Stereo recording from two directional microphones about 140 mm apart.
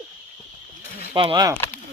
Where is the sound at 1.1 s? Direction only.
35° right (ahead or behind).